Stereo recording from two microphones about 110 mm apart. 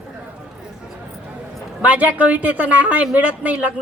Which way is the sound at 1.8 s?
15° right (ahead or behind).